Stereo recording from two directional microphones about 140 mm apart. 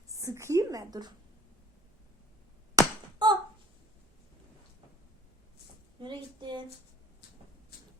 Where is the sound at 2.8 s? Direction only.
30° right (ahead or behind).